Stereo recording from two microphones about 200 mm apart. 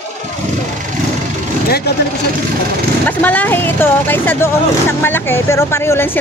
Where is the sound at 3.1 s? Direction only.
10° left (ahead or behind).